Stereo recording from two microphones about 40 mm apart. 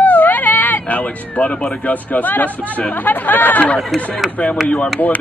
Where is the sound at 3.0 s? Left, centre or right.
Left.